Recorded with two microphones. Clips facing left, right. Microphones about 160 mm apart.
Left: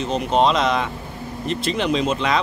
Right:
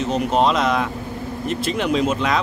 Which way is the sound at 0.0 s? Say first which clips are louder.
Even; 5° right (ahead or behind).